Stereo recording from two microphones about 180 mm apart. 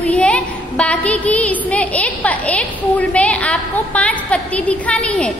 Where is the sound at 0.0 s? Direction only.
5° left (ahead or behind).